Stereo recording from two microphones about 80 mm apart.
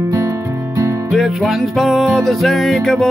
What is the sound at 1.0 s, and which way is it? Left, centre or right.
Music, centre.